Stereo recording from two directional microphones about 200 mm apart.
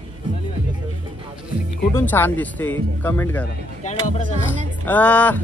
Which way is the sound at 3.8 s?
35° left (ahead or behind).